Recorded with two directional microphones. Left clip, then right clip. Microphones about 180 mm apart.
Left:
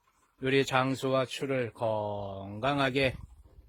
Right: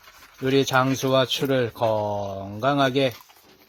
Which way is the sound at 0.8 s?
Centre (ahead or behind).